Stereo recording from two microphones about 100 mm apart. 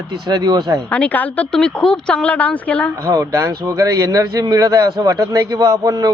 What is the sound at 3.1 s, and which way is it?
Speech, 35° right (ahead or behind).